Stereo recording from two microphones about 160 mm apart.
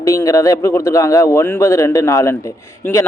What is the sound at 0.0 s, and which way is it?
A man's voice, 20° left (ahead or behind).